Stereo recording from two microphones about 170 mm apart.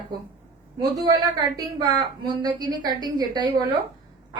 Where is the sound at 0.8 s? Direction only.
25° right (ahead or behind).